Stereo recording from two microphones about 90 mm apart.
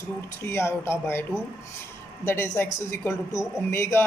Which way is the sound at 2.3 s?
25° left (ahead or behind).